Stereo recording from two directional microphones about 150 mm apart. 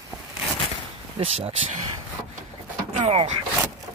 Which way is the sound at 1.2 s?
35° right (ahead or behind).